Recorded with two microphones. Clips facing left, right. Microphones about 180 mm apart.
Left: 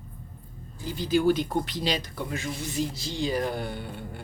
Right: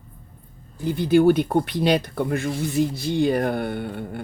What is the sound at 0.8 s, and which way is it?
Speech, 60° right (ahead or behind).